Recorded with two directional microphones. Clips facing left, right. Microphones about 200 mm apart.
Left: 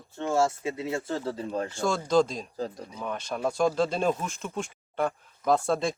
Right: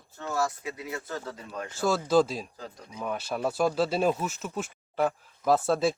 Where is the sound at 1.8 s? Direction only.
5° right (ahead or behind).